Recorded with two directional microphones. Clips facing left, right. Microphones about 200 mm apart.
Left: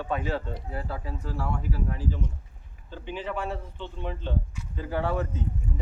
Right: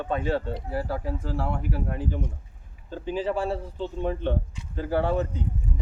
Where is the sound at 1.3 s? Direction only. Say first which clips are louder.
Right 1 dB; 60° right (ahead or behind).